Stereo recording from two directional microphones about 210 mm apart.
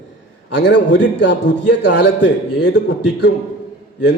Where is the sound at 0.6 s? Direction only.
55° left (ahead or behind).